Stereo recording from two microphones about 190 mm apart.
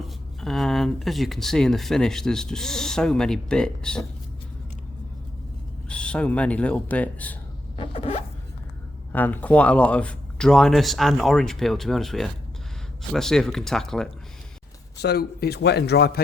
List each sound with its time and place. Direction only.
0.3 s speech: centre (ahead or behind)
5.9 s speech: 5° left (ahead or behind)
7.8 s zipper: 30° left (ahead or behind)
9.1 s speech: 10° left (ahead or behind)
15.0 s a man's voice: 55° left (ahead or behind)